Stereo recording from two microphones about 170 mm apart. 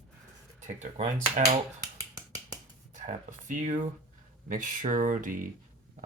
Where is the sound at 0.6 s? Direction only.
45° right (ahead or behind).